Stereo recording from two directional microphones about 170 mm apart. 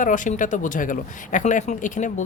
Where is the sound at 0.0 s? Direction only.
50° left (ahead or behind).